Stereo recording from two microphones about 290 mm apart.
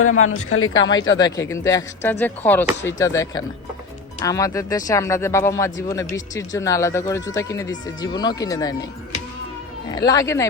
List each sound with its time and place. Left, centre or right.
0.0 s speech: left
1.2 s speech: centre
9.9 s speech: centre